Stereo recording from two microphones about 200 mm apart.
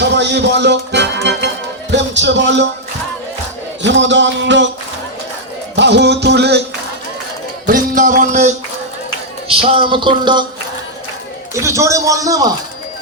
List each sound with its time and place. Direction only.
0.0 s music: 60° right (ahead or behind)
3.8 s music: 65° right (ahead or behind)
5.7 s music: 60° right (ahead or behind)
7.7 s music: 40° right (ahead or behind)
9.5 s a sound: 25° right (ahead or behind)
11.5 s speech: 15° right (ahead or behind)